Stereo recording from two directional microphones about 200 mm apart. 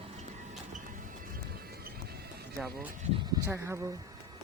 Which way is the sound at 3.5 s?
15° right (ahead or behind).